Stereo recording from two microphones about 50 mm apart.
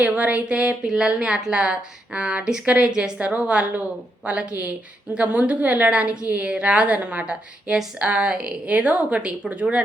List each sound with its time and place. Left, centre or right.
0.0 s a woman's voice: right
0.9 s a woman's voice: centre
8.6 s a woman's voice: right